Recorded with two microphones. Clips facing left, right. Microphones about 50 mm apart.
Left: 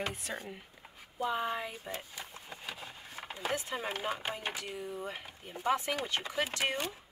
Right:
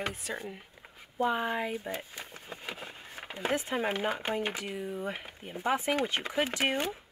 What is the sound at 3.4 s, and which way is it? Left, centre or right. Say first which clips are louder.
Speech: right 5 dB; right.